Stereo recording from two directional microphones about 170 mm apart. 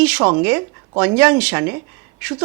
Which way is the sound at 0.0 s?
10° right (ahead or behind).